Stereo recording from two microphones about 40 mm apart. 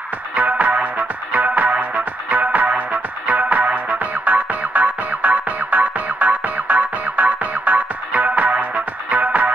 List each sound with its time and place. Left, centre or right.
0.3 s music: right